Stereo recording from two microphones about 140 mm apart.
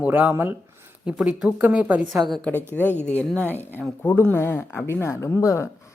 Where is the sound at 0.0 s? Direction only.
10° right (ahead or behind).